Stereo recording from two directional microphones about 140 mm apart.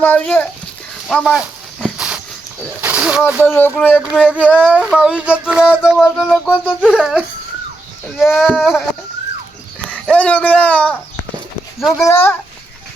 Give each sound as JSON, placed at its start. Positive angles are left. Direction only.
{"t": 0.0, "sound": "a child's voice", "side_deg": 10}
{"t": 1.0, "sound": "a sound", "side_deg": 0}
{"t": 2.8, "sound": "speech", "side_deg": -10}
{"t": 3.4, "sound": "a child's voice", "side_deg": 15}
{"t": 4.0, "sound": "a sound", "side_deg": -5}
{"t": 5.8, "sound": "speech", "side_deg": -5}
{"t": 9.9, "sound": "speech", "side_deg": 10}
{"t": 11.9, "sound": "speech", "side_deg": 20}